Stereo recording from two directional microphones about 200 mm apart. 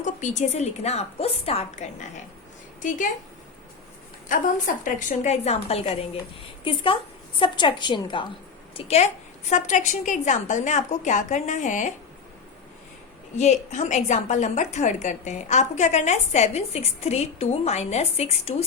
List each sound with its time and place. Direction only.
0.0 s a woman's voice: 35° left (ahead or behind)
4.3 s a woman's voice: 40° left (ahead or behind)
13.3 s a woman's voice: 35° left (ahead or behind)